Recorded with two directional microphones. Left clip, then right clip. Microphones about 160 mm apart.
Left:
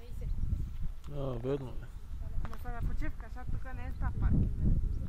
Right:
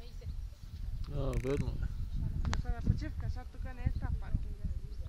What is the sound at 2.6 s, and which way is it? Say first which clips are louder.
Speech: even; 50° right (ahead or behind).